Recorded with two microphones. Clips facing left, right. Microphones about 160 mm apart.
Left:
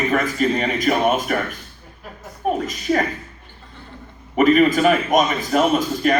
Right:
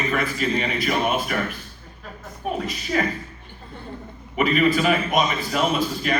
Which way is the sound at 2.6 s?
45° left (ahead or behind).